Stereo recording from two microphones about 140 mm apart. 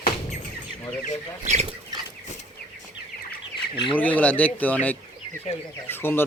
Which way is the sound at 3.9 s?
10° left (ahead or behind).